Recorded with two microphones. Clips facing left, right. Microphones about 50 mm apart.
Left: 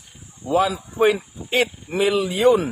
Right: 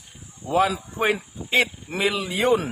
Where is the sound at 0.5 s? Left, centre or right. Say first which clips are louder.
Left 1 dB; right.